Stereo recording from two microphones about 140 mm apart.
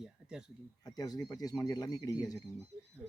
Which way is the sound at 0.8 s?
30° left (ahead or behind).